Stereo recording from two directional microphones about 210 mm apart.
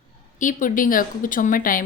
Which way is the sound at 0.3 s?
40° left (ahead or behind).